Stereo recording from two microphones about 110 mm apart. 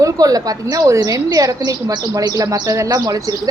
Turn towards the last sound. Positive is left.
turn(degrees=-35)  # may be behind; listen again after turning